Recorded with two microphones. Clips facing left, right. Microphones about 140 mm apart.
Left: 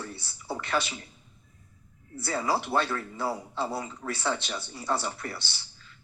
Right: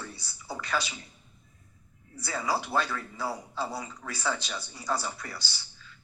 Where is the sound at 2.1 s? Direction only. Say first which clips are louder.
Left 2 dB; 25° left (ahead or behind).